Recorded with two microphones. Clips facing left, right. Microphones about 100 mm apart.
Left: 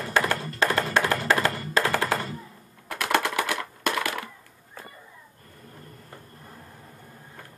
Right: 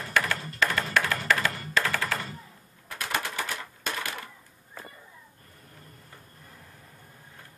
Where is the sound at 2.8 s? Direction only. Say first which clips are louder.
Left 7 dB; 75° left (ahead or behind).